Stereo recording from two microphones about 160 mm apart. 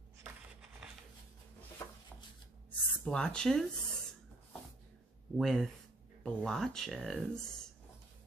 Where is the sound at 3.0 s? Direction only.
5° left (ahead or behind).